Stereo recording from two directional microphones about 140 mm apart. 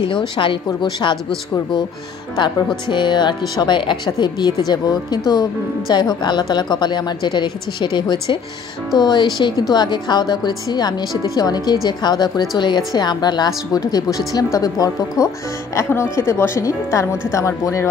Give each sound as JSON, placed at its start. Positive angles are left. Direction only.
{"t": 0.7, "sound": "speech", "side_deg": 30}
{"t": 2.9, "sound": "a woman's voice", "side_deg": 35}